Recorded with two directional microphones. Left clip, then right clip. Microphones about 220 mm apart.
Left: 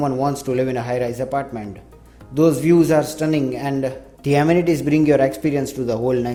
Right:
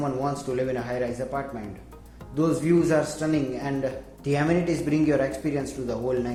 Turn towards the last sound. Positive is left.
turn(degrees=40)  # may be behind; listen again after turning